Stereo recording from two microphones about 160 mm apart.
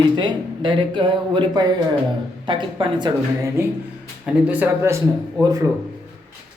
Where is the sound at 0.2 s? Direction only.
30° right (ahead or behind).